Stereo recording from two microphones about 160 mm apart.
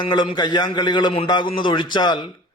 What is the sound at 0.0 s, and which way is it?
A man's voice, 30° left (ahead or behind).